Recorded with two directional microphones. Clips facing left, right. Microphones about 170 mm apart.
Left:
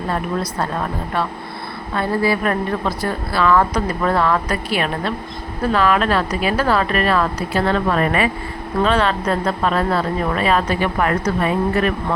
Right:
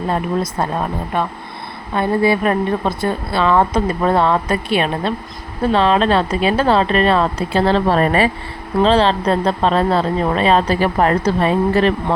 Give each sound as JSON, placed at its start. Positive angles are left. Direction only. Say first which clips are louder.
{"t": 0.6, "sound": "a woman's voice", "louder": "right 2 dB", "side_deg": -20}